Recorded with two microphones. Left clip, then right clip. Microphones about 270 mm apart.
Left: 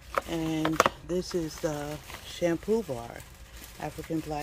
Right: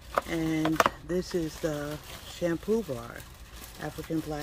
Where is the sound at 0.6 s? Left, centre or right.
Centre.